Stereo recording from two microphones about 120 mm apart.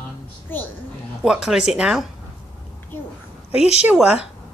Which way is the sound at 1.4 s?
5° right (ahead or behind).